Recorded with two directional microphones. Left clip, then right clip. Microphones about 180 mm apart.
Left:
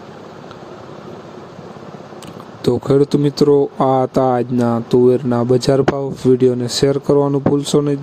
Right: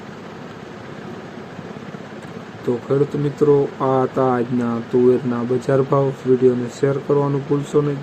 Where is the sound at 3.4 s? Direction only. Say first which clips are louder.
Left 2 dB; 60° left (ahead or behind).